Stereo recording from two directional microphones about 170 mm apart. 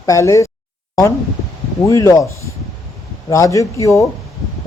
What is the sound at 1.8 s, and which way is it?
Speech, 20° left (ahead or behind).